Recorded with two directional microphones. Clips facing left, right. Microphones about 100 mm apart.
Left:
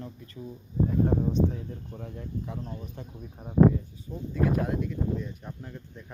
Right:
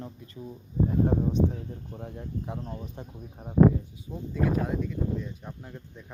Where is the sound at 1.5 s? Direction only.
40° right (ahead or behind).